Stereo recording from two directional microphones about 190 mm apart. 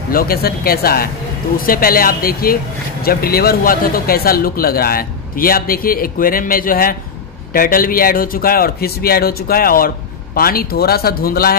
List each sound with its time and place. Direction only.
0.1 s speech: 50° left (ahead or behind)